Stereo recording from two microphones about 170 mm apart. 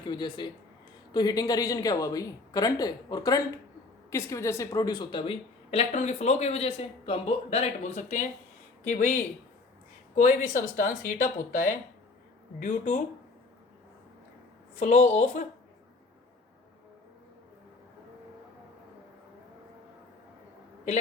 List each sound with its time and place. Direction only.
0.0 s a woman's voice: 25° left (ahead or behind); by 13.0 s 45° left (ahead or behind)
14.8 s speech: 45° left (ahead or behind)